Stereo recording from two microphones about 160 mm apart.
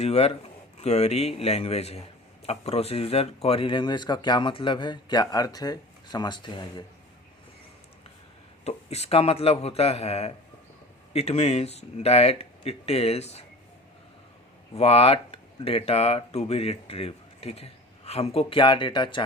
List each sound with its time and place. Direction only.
0.0 s speech: 40° left (ahead or behind)
8.6 s speech: 40° left (ahead or behind)
14.7 s speech: 40° left (ahead or behind)